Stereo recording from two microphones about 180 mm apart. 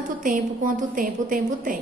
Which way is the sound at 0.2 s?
50° right (ahead or behind).